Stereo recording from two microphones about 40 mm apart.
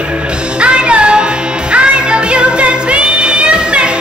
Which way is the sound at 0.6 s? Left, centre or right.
Right.